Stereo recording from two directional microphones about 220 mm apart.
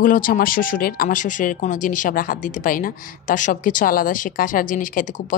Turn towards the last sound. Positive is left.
turn(degrees=35)  # may be behind; listen again after turning